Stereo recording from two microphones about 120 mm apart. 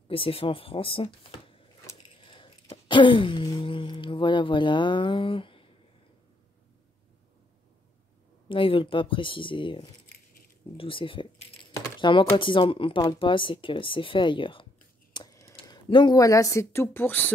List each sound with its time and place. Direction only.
0.1 s speech: 50° left (ahead or behind)
2.0 s a sound: 45° left (ahead or behind)
3.4 s speech: 45° left (ahead or behind)
8.5 s speech: 45° left (ahead or behind)
15.2 s a sound: 40° left (ahead or behind)
16.2 s speech: 30° left (ahead or behind)